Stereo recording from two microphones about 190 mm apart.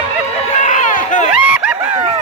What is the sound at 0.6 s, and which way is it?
Run, 40° left (ahead or behind).